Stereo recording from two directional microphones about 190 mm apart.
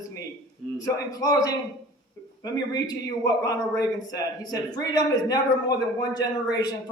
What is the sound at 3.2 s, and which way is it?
A man's voice, 20° left (ahead or behind).